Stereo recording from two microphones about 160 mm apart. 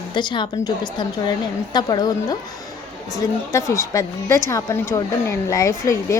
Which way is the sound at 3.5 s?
20° left (ahead or behind).